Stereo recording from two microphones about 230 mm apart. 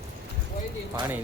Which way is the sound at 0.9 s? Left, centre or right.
Centre.